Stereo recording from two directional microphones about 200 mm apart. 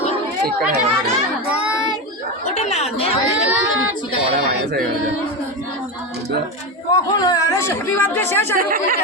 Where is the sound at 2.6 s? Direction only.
35° left (ahead or behind).